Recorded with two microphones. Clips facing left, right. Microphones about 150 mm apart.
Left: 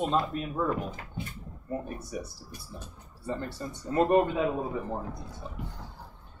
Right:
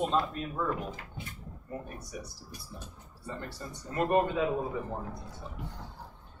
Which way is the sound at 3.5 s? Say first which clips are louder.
Left 7 dB; 25° left (ahead or behind).